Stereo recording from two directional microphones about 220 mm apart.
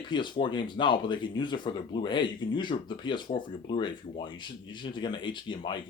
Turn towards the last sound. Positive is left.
turn(degrees=20)  # may be behind; listen again after turning